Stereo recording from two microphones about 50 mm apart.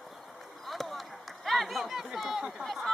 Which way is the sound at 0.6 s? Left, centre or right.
Centre.